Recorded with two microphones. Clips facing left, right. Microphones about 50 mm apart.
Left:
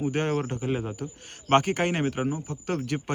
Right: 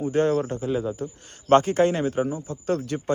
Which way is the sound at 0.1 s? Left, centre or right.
Left.